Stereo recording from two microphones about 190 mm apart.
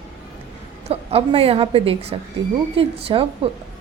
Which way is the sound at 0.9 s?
30° right (ahead or behind).